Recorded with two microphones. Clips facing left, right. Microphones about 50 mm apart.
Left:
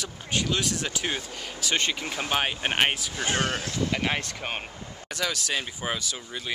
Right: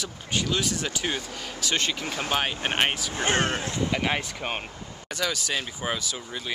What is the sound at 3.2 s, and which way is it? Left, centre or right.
Speech, right.